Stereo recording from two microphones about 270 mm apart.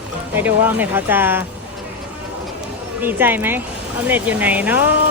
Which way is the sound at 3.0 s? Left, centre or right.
Centre.